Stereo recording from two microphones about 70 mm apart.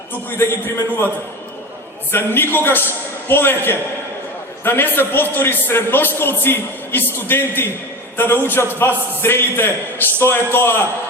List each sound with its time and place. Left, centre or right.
0.3 s a man's voice: left
2.1 s a man's voice: left